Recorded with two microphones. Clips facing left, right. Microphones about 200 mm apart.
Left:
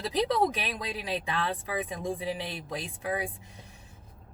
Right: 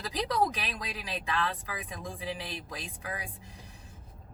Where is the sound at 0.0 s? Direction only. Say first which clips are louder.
Left 3 dB; 25° left (ahead or behind).